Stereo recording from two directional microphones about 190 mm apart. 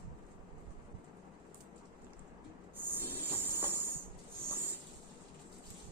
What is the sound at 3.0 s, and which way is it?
Train, 10° right (ahead or behind).